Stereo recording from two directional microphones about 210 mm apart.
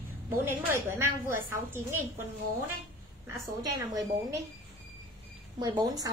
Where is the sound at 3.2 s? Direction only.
15° right (ahead or behind).